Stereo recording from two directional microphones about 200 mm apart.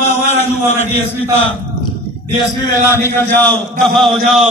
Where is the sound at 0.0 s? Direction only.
35° left (ahead or behind).